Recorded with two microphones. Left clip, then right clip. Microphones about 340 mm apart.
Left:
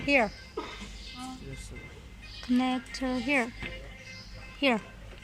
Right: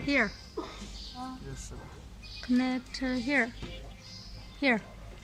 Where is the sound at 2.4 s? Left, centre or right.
Centre.